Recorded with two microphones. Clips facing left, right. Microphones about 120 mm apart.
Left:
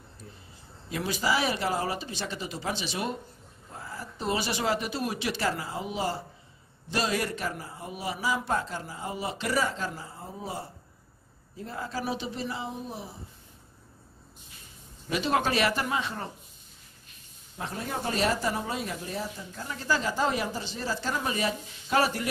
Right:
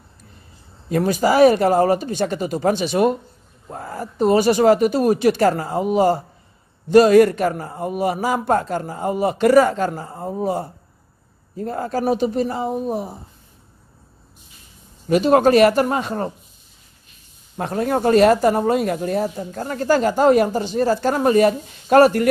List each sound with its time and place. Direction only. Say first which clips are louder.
0.8 s speech: right 11 dB; 50° right (ahead or behind)
15.0 s speech: right 13 dB; 50° right (ahead or behind)
17.6 s speech: right 13 dB; 60° right (ahead or behind)